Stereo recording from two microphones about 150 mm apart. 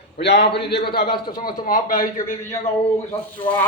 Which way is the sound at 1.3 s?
65° left (ahead or behind).